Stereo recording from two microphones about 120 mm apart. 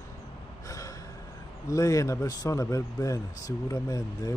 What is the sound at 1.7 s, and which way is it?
Speech, 25° left (ahead or behind).